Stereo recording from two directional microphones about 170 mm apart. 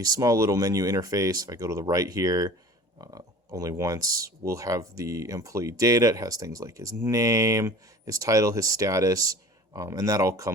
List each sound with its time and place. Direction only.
0.0 s speech: 20° right (ahead or behind)